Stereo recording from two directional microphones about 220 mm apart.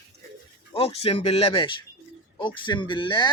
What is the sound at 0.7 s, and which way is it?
Speech, 25° left (ahead or behind).